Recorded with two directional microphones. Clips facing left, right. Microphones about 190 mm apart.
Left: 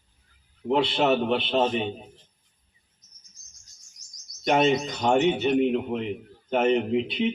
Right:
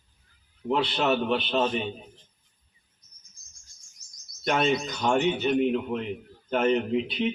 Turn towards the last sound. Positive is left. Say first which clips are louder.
# left 2 dB
turn(degrees=25)  # may be behind; listen again after turning